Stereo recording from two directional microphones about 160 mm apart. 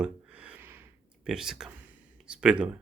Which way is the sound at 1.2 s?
5° right (ahead or behind).